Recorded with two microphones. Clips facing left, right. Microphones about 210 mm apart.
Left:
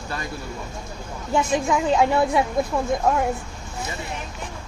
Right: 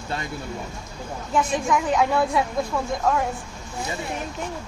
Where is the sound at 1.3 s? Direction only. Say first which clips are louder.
Left 1 dB; 25° left (ahead or behind).